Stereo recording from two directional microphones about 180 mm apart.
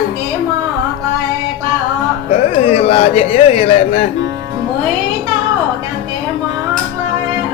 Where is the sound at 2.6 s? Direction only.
35° left (ahead or behind).